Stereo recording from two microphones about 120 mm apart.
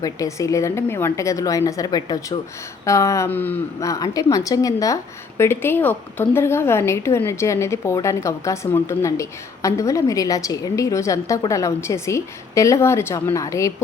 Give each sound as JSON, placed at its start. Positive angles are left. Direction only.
{"t": 0.0, "sound": "a woman's voice", "side_deg": 25}
{"t": 3.2, "sound": "speech", "side_deg": 15}
{"t": 3.8, "sound": "a woman's voice", "side_deg": 30}